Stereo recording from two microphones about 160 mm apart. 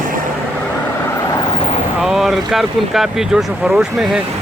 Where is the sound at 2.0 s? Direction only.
Centre (ahead or behind).